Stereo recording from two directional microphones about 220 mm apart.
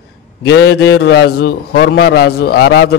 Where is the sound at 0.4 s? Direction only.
50° left (ahead or behind).